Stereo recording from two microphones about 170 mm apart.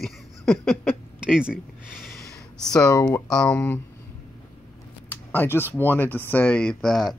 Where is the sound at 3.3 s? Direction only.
5° left (ahead or behind).